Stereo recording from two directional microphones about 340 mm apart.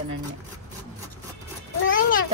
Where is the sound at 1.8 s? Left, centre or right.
Left.